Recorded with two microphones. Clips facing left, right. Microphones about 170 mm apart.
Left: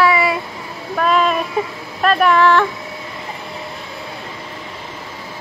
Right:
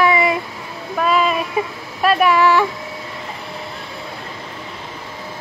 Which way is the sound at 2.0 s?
10° right (ahead or behind).